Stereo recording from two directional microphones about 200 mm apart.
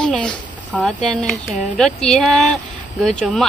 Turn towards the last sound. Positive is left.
turn(degrees=5)  # may be behind; listen again after turning